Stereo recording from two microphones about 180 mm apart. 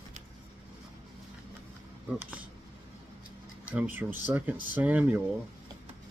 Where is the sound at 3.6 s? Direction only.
10° right (ahead or behind).